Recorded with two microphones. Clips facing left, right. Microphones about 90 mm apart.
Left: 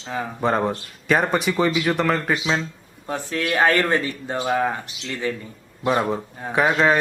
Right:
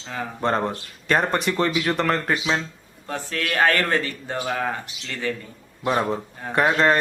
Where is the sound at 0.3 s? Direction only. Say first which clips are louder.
Left 2 dB; 5° left (ahead or behind).